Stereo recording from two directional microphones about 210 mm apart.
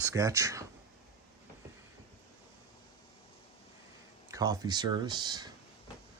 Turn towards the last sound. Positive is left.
turn(degrees=-20)  # may be behind; listen again after turning